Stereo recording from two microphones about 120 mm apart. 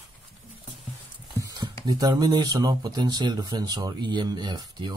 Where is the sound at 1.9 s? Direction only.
30° right (ahead or behind).